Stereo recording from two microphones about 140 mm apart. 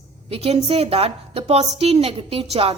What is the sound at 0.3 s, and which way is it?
A woman's voice, 45° right (ahead or behind).